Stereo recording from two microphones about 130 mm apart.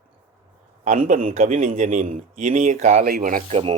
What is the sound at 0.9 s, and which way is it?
A man's voice, 65° right (ahead or behind).